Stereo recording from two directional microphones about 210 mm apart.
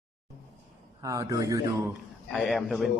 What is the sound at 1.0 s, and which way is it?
Speech, 15° right (ahead or behind).